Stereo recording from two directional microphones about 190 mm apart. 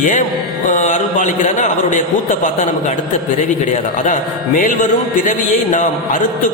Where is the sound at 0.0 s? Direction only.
40° left (ahead or behind).